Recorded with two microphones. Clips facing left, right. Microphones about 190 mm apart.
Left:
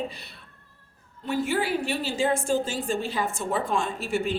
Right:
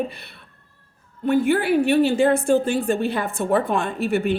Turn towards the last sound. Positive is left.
turn(degrees=-60)  # may be behind; listen again after turning